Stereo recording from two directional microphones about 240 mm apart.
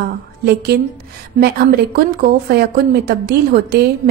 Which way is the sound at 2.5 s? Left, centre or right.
Right.